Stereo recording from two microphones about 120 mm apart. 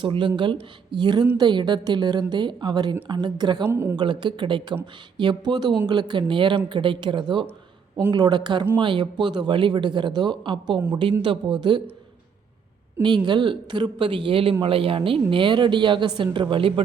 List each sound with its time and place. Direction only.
0.0 s a woman's voice: 40° right (ahead or behind)
3.7 s speech: 20° right (ahead or behind)
3.9 s a woman's voice: 40° right (ahead or behind)
13.0 s a woman's voice: 40° right (ahead or behind)